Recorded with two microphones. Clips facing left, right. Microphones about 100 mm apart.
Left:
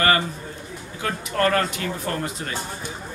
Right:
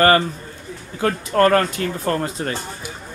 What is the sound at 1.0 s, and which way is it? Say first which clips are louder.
Speech: right 6 dB; 40° right (ahead or behind).